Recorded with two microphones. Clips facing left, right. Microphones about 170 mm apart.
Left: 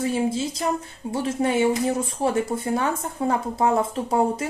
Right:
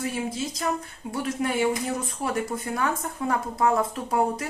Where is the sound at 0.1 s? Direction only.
25° left (ahead or behind).